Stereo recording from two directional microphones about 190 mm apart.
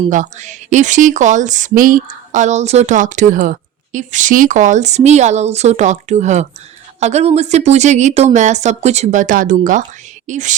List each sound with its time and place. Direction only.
0.1 s speech: 40° right (ahead or behind)